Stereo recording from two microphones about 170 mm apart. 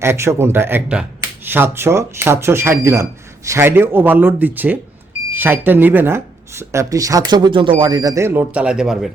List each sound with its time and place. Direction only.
0.0 s speech: 15° right (ahead or behind)